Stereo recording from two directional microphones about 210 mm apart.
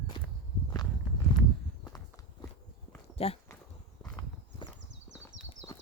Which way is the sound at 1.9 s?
15° left (ahead or behind).